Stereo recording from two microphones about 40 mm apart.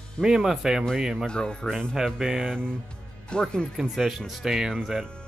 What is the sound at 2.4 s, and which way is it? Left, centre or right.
Speech, left.